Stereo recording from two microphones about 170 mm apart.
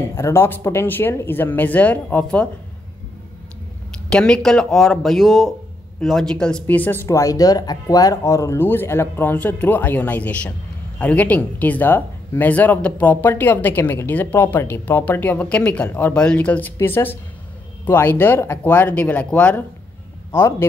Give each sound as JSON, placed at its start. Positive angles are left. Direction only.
{"t": 0.1, "sound": "speech", "side_deg": 15}
{"t": 4.1, "sound": "a man's voice", "side_deg": 5}